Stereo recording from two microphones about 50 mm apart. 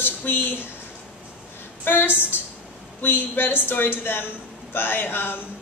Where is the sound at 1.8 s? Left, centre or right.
Left.